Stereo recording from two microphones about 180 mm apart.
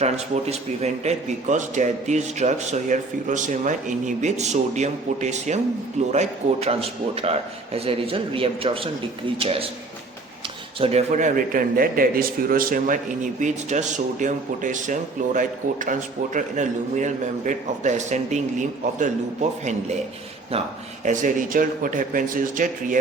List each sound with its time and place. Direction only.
0.0 s a man's voice: 35° right (ahead or behind)
10.8 s speech: 35° right (ahead or behind)
21.0 s speech: 45° right (ahead or behind)